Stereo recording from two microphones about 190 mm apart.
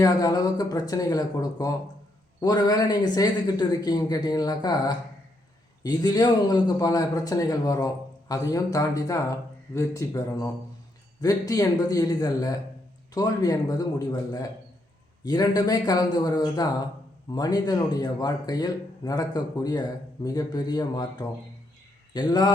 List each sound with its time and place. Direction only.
0.0 s speech: 20° left (ahead or behind)